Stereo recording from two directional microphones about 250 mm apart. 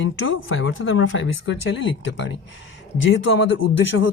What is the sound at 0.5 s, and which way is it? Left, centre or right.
Speech, left.